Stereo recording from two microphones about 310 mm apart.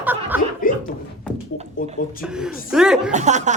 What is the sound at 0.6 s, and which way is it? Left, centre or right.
Speech, left.